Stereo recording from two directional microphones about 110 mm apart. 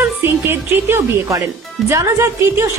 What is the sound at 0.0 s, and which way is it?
Music, 20° right (ahead or behind).